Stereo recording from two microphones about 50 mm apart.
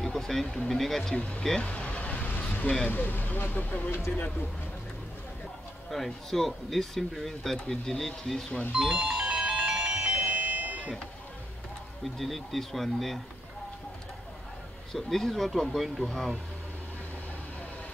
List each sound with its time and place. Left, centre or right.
0.0 s speech: centre
1.1 s speech: left
1.6 s vehicle: left
2.9 s speech: left
5.9 s speech: centre
7.5 s speech: centre
8.7 s music: centre
10.1 s music: right
12.0 s speech: centre
15.0 s speech: centre